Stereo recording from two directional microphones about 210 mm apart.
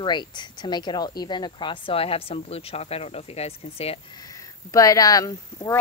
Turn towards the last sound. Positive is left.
turn(degrees=15)  # may be behind; listen again after turning